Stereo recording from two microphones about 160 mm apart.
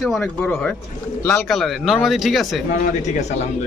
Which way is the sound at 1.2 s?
15° left (ahead or behind).